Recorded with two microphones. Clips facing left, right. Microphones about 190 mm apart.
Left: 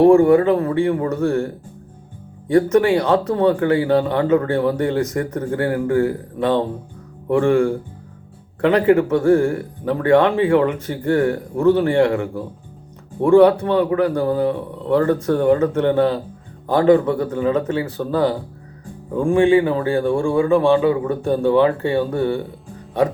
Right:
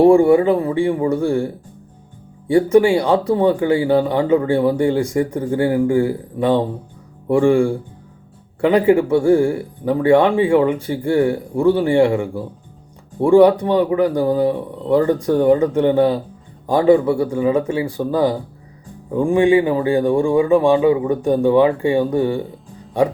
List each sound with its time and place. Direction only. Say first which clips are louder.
0.0 s a man's voice: even; 15° right (ahead or behind)